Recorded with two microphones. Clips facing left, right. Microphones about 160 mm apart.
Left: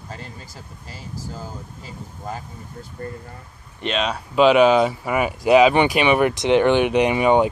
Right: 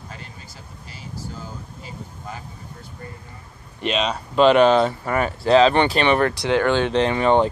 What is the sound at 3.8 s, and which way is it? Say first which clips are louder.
Speech: right 1 dB; centre (ahead or behind).